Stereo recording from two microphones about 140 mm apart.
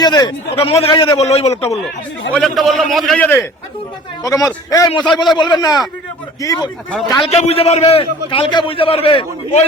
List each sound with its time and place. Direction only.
0.0 s a man's voice: 30° left (ahead or behind); by 1.7 s 50° left (ahead or behind)
2.3 s a man's voice: centre (ahead or behind)
3.1 s a man's voice: 15° left (ahead or behind)
4.2 s a man's voice: 25° left (ahead or behind)
5.1 s a man's voice: centre (ahead or behind)
5.4 s a man's voice: 30° left (ahead or behind)
7.3 s a man's voice: 50° left (ahead or behind)